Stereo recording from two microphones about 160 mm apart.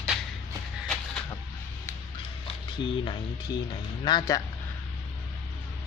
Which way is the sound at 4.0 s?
30° left (ahead or behind).